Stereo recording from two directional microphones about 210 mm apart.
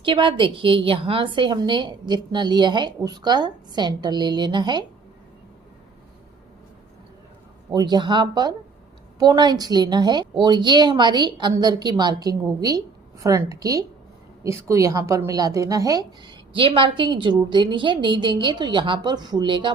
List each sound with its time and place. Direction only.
0.0 s a woman's voice: 25° right (ahead or behind)
7.7 s a woman's voice: 20° right (ahead or behind)